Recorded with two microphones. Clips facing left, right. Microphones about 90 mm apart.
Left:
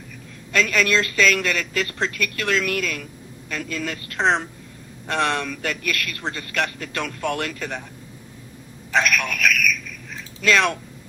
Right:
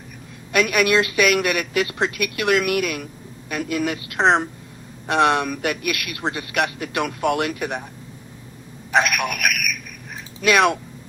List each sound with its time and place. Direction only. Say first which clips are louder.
0.5 s speech: right 2 dB; 15° right (ahead or behind)
8.9 s speech: right 2 dB; 15° right (ahead or behind)